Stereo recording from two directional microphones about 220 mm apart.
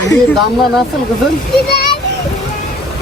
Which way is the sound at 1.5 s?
45° left (ahead or behind).